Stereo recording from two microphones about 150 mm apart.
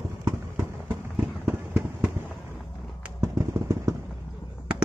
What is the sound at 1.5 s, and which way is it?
Fireworks, 15° right (ahead or behind).